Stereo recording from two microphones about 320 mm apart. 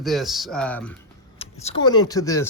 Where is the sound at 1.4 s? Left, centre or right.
Centre.